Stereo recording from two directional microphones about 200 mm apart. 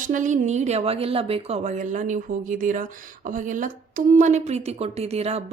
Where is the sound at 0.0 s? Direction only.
40° right (ahead or behind).